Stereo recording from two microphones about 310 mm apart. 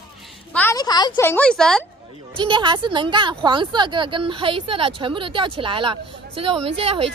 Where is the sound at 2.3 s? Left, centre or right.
Centre.